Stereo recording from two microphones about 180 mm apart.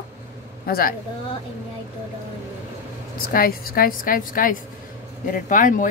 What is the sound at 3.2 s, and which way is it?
A woman's voice, 55° left (ahead or behind).